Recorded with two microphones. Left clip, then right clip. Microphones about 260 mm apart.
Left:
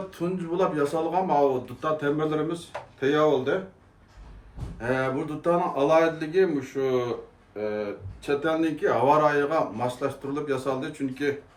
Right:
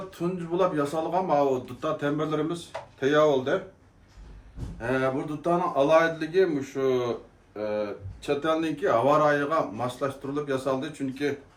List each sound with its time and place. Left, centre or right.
0.1 s speech: centre
4.8 s speech: centre